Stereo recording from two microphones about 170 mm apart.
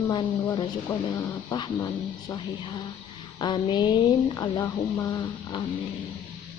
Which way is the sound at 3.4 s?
25° left (ahead or behind).